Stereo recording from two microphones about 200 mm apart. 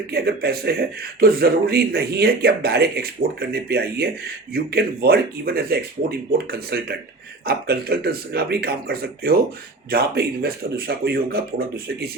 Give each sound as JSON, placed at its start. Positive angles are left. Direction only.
{"t": 0.1, "sound": "a man's voice", "side_deg": -50}